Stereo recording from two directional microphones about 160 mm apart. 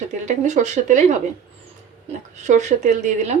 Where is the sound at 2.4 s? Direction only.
45° right (ahead or behind).